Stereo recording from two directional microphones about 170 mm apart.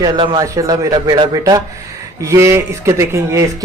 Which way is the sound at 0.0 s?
25° right (ahead or behind).